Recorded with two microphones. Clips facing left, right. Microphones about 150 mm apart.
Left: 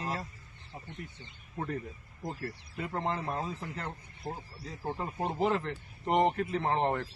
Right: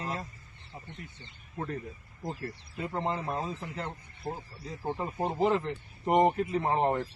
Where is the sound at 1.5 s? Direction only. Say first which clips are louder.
Even; 5° left (ahead or behind).